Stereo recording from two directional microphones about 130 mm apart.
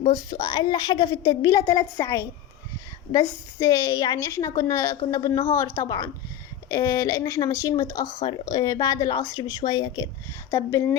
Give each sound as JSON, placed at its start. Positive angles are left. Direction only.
{"t": 0.0, "sound": "a woman's voice", "side_deg": 30}
{"t": 10.5, "sound": "a woman's voice", "side_deg": 20}